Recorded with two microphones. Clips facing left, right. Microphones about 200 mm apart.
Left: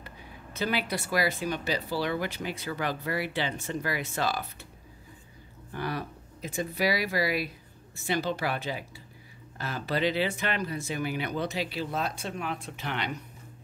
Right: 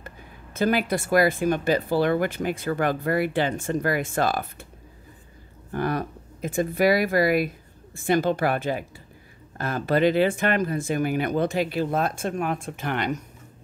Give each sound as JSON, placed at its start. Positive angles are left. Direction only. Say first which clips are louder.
{"t": 0.0, "sound": "speech", "louder": "right 2 dB", "side_deg": -50}
{"t": 5.7, "sound": "speech", "louder": "right 7 dB", "side_deg": -50}